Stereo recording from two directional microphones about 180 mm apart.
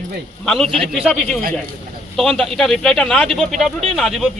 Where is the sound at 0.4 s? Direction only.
Centre (ahead or behind).